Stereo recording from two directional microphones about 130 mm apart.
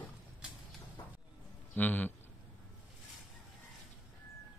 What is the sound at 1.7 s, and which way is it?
Speech, 15° left (ahead or behind).